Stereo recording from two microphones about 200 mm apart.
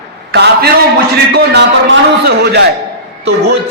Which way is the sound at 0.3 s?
50° right (ahead or behind).